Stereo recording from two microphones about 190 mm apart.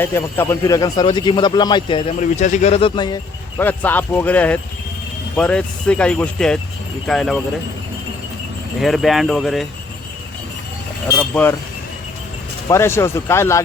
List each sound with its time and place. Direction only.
0.0 s a man's voice: 10° left (ahead or behind)
2.1 s speech: 40° left (ahead or behind); by 3.2 s 25° left (ahead or behind)
3.6 s speech: 10° left (ahead or behind)
8.8 s speech: centre (ahead or behind)
11.2 s speech: 10° left (ahead or behind)
12.6 s speech: 15° left (ahead or behind)